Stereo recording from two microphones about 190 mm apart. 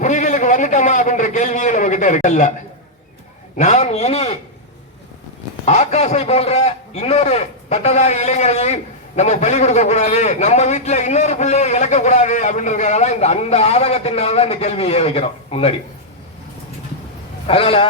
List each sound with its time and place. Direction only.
0.0 s a sound: 40° left (ahead or behind)
3.6 s a man's voice: 40° left (ahead or behind)
5.6 s a man's voice: 35° left (ahead or behind)
17.4 s a man's voice: 30° left (ahead or behind)